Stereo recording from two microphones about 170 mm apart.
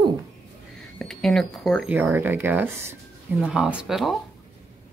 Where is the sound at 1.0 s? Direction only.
Centre (ahead or behind).